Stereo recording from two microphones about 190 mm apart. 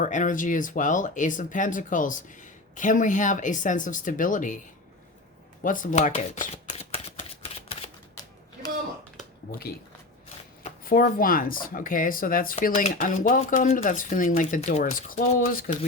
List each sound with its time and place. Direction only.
0.0 s speech: 40° left (ahead or behind)
5.6 s shuffling cards: 45° left (ahead or behind)
9.5 s speech: 50° left (ahead or behind)